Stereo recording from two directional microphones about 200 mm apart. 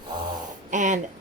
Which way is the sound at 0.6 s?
40° right (ahead or behind).